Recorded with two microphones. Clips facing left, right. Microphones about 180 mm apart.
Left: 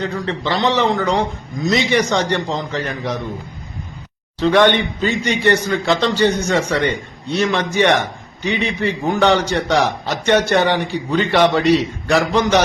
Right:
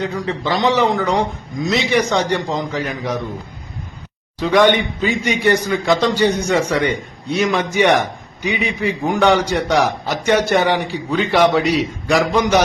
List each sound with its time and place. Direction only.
0.0 s a man's voice: 10° right (ahead or behind)
4.4 s a man's voice: 10° right (ahead or behind)